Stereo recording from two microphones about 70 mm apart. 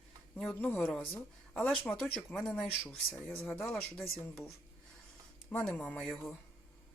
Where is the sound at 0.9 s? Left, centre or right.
Centre.